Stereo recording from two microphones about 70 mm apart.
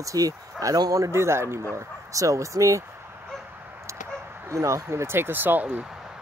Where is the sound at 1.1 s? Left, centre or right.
Right.